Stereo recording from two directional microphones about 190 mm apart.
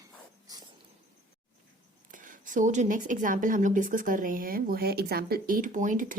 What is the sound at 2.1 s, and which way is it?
Speech, 45° right (ahead or behind).